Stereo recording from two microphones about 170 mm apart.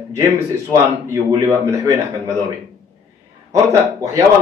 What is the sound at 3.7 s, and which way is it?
Speech, 20° right (ahead or behind).